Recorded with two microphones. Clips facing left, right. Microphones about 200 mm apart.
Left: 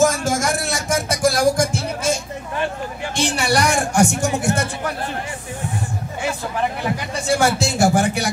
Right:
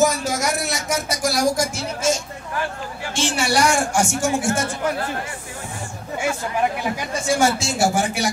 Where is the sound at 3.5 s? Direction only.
60° left (ahead or behind).